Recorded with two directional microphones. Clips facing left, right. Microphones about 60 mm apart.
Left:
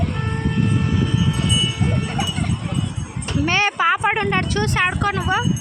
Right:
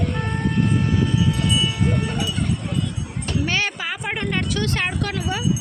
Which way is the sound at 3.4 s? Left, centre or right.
Left.